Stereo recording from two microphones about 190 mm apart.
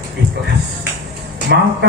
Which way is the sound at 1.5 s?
65° right (ahead or behind).